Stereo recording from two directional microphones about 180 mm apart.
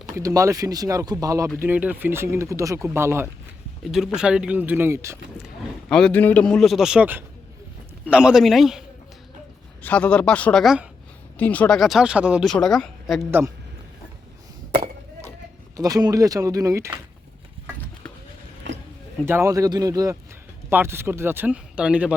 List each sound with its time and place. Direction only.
0.2 s speech: 15° right (ahead or behind)
3.8 s speech: centre (ahead or behind)
5.9 s speech: 5° left (ahead or behind)
9.8 s speech: 5° left (ahead or behind)
15.7 s speech: 20° right (ahead or behind)
19.2 s speech: 15° right (ahead or behind)